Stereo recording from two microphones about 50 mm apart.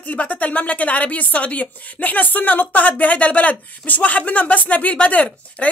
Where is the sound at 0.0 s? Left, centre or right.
Left.